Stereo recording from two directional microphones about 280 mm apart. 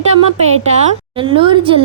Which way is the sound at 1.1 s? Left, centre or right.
Centre.